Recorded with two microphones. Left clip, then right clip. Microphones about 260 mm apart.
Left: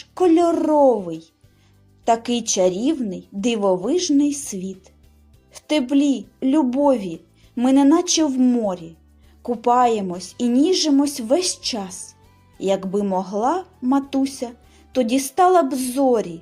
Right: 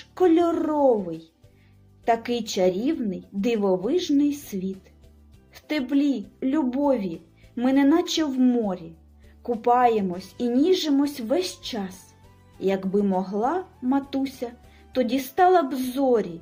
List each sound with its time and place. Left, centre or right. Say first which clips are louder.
0.1 s a woman's voice: left 4 dB; centre
5.5 s music: left 7 dB; left
5.9 s a woman's voice: left 4 dB; left